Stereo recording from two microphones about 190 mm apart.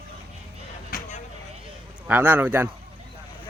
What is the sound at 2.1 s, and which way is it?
Speech, 10° right (ahead or behind).